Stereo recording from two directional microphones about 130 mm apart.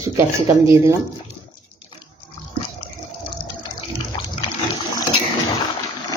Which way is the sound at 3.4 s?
20° right (ahead or behind).